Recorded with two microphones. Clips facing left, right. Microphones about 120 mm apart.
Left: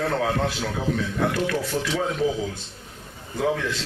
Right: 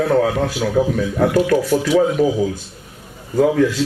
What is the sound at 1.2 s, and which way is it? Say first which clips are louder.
Speech: right 12 dB; 40° right (ahead or behind).